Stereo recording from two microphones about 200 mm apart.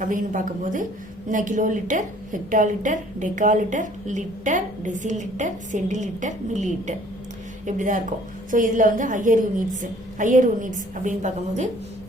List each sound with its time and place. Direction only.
0.0 s a woman's voice: 40° right (ahead or behind)